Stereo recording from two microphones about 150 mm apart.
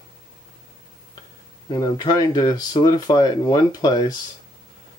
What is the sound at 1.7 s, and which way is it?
Speech, 30° left (ahead or behind).